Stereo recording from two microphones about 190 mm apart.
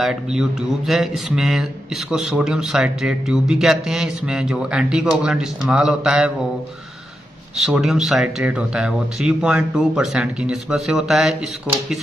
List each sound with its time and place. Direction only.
0.0 s speech: 5° right (ahead or behind)
7.5 s speech: centre (ahead or behind)